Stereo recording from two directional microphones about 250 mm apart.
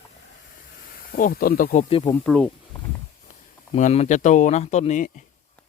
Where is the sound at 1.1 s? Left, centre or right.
Left.